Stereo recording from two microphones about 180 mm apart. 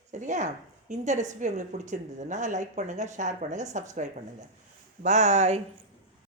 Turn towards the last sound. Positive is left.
turn(degrees=-40)  # may be behind; listen again after turning